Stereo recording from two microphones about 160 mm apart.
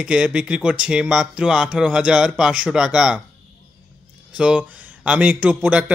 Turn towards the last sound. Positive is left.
turn(degrees=-5)  # may be behind; listen again after turning